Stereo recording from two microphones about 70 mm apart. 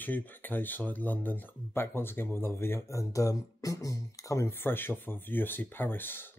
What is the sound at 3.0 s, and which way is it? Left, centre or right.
Speech, left.